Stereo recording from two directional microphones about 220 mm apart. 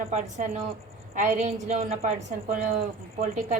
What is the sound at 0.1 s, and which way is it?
Speech, 35° right (ahead or behind).